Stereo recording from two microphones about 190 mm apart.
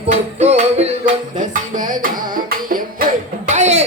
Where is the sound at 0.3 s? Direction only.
35° right (ahead or behind).